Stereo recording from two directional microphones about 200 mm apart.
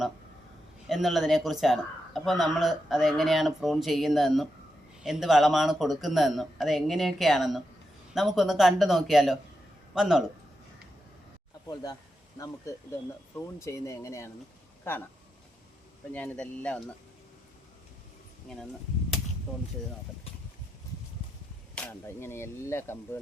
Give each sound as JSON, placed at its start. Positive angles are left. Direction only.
{"t": 0.9, "sound": "speech", "side_deg": 0}
{"t": 11.7, "sound": "speech", "side_deg": 20}
{"t": 13.3, "sound": "whip", "side_deg": 15}
{"t": 16.1, "sound": "speech", "side_deg": 5}
{"t": 18.4, "sound": "speech", "side_deg": 5}
{"t": 21.8, "sound": "whip", "side_deg": 10}